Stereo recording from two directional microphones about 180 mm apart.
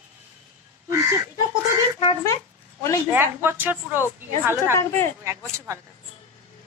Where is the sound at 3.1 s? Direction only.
10° right (ahead or behind).